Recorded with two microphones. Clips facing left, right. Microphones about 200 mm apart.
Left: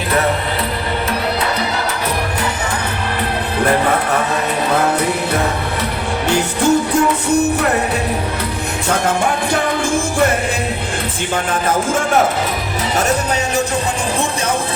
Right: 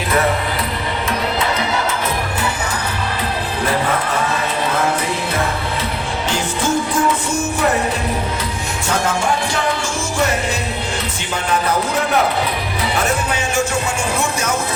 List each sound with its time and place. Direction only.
6.2 s music: 65° left (ahead or behind)